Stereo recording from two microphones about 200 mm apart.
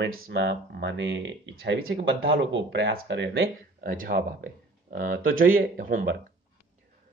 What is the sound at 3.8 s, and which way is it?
Speech, 45° right (ahead or behind).